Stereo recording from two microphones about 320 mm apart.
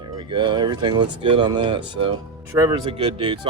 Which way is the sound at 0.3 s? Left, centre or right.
Centre.